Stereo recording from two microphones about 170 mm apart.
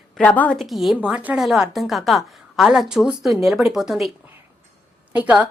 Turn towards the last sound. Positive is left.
turn(degrees=-5)  # may be behind; listen again after turning